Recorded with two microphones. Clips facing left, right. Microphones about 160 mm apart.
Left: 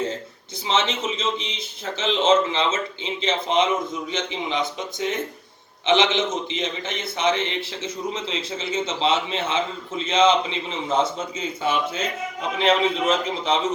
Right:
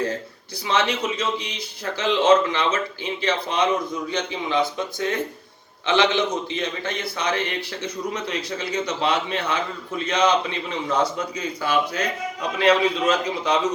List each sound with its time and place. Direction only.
0.7 s a man's voice: 25° left (ahead or behind)
7.9 s a man's voice: 60° right (ahead or behind)
8.3 s a man's voice: 25° left (ahead or behind)